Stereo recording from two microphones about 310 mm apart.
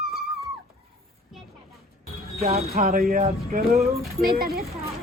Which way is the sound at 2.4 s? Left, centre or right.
Centre.